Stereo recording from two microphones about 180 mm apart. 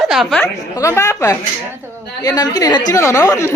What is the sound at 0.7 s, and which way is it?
A woman's voice, 15° left (ahead or behind).